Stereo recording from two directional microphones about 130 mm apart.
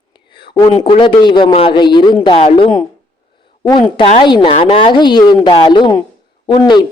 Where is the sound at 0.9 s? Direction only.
40° left (ahead or behind).